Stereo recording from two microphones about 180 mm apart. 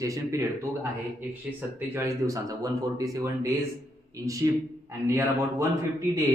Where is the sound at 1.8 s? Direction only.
10° right (ahead or behind).